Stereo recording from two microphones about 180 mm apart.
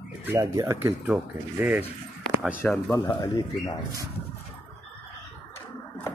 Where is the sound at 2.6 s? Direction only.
15° left (ahead or behind).